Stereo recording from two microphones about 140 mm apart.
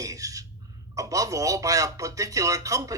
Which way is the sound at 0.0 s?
25° right (ahead or behind).